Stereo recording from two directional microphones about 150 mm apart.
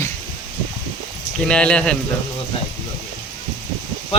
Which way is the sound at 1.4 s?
5° left (ahead or behind).